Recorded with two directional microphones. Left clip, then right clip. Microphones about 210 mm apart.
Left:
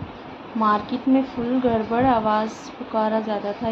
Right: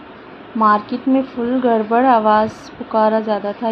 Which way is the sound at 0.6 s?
20° right (ahead or behind).